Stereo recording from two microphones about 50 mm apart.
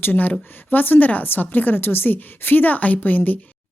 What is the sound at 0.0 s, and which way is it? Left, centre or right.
A woman's voice, left.